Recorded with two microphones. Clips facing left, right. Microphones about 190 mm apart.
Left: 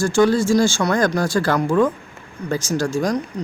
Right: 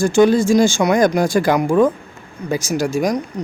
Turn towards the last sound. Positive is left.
turn(degrees=-10)  # may be behind; listen again after turning